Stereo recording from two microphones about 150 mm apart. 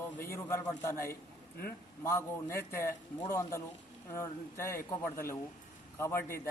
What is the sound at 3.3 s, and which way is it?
Speech, 20° left (ahead or behind).